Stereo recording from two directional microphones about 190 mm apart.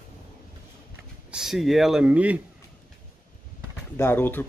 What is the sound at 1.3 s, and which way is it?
Speech, centre (ahead or behind).